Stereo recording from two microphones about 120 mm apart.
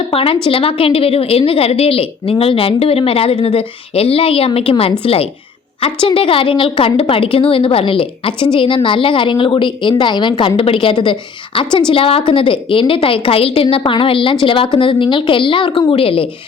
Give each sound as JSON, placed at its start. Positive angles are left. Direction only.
{"t": 0.1, "sound": "a woman's voice", "side_deg": 50}